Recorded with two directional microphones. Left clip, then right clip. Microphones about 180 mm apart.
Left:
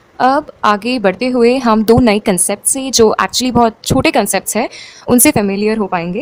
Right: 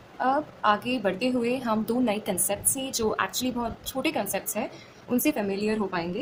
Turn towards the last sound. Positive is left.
turn(degrees=45)  # may be behind; listen again after turning